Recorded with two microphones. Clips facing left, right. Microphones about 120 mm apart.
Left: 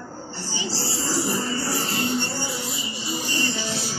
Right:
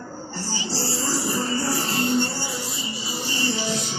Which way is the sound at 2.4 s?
Centre (ahead or behind).